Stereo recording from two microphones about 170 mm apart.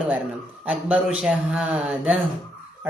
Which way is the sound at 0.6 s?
10° right (ahead or behind).